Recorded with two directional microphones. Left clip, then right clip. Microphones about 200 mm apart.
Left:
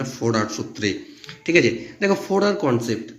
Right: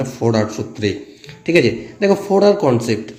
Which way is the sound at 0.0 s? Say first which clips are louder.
Right 5 dB; centre (ahead or behind).